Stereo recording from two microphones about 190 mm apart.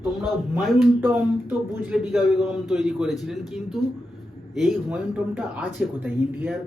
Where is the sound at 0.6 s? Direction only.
Centre (ahead or behind).